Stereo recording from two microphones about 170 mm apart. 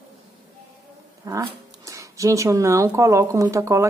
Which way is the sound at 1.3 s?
20° right (ahead or behind).